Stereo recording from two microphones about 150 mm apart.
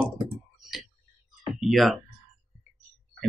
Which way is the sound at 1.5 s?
Centre (ahead or behind).